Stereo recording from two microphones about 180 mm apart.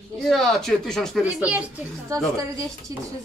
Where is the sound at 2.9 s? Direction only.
20° right (ahead or behind).